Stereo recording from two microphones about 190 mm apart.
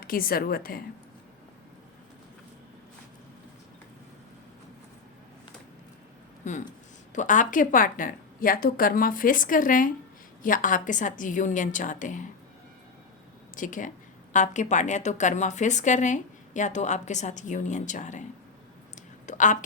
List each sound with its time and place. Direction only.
0.0 s a woman's voice: 50° left (ahead or behind)
6.4 s a woman's voice: 40° left (ahead or behind)
13.6 s a woman's voice: 45° left (ahead or behind)